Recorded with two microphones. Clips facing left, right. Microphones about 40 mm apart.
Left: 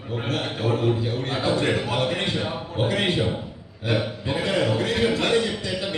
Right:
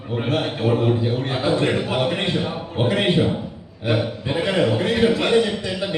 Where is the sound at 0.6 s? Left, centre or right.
Right.